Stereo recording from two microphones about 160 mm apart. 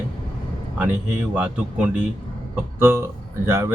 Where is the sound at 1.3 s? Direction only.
10° right (ahead or behind).